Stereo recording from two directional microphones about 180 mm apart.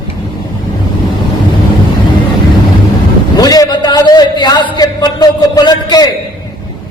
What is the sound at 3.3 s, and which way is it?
A man's voice, 20° left (ahead or behind).